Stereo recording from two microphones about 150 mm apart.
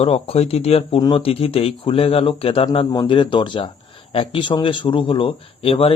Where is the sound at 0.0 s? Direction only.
40° left (ahead or behind).